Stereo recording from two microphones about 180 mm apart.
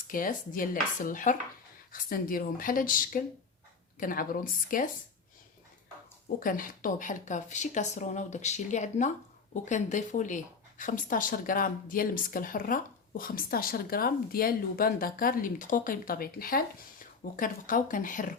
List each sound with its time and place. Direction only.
0.1 s speech: 50° left (ahead or behind)
6.2 s speech: 50° left (ahead or behind)